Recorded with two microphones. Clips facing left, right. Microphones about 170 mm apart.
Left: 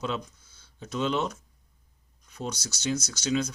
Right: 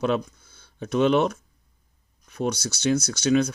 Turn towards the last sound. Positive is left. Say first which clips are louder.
# right 7 dB
turn(degrees=-60)  # may be behind; listen again after turning